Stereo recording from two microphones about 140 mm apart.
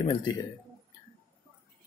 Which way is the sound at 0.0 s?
35° left (ahead or behind).